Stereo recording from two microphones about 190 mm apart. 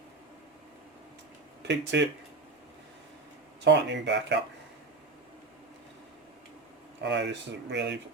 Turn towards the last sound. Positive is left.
turn(degrees=-65)  # may be behind; listen again after turning